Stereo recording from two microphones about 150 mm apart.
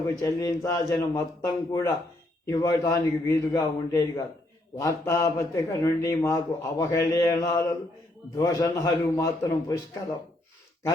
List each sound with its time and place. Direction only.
0.2 s a man's voice: 20° left (ahead or behind)